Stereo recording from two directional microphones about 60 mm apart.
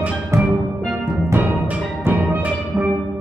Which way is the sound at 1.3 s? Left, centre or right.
Right.